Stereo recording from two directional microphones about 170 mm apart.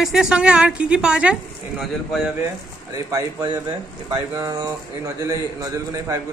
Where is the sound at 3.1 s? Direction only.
20° right (ahead or behind).